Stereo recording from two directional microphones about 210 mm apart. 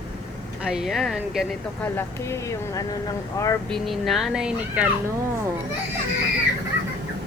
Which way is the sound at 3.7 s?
Centre (ahead or behind).